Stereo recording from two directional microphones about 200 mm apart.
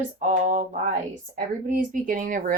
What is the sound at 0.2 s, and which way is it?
Speech, 40° right (ahead or behind).